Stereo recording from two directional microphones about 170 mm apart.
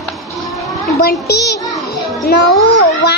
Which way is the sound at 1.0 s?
70° left (ahead or behind).